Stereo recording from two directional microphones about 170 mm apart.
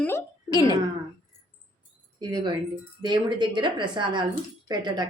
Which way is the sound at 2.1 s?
25° right (ahead or behind).